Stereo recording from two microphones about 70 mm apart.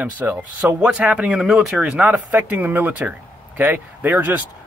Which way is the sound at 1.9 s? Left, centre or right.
Right.